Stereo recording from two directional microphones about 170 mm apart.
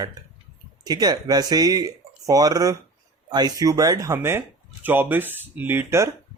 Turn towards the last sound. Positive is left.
turn(degrees=-15)  # may be behind; listen again after turning